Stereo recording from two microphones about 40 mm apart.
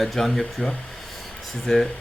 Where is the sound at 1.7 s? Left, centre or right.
Centre.